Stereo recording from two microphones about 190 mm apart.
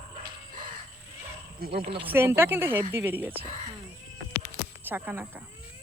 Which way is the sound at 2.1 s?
10° right (ahead or behind).